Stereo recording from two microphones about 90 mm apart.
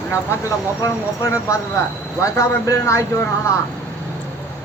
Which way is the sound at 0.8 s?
35° left (ahead or behind).